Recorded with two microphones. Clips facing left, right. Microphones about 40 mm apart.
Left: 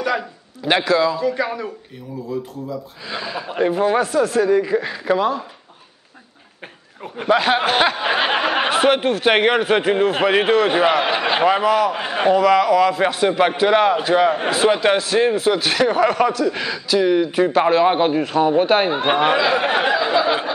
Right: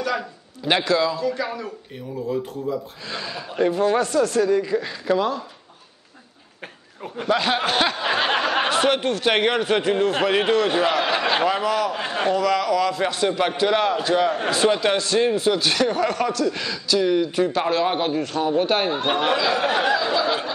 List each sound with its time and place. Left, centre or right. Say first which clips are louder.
0.0 s speech: left 3 dB; centre
3.1 s speech: left 5 dB; centre
7.0 s speech: left 4 dB; centre